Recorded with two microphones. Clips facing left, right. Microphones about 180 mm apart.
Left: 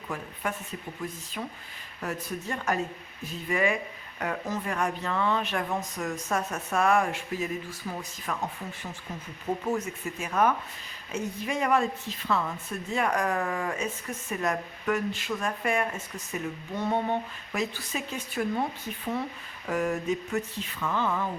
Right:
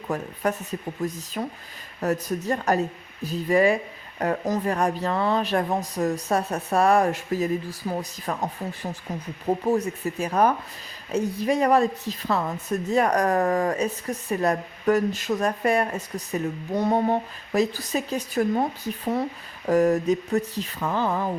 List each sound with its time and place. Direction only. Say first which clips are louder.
0.1 s a woman's voice: right 8 dB; 40° right (ahead or behind)